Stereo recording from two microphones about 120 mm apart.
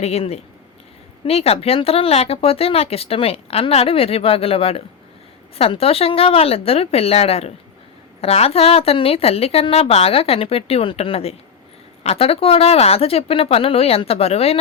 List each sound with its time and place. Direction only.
0.0 s a woman's voice: 60° left (ahead or behind)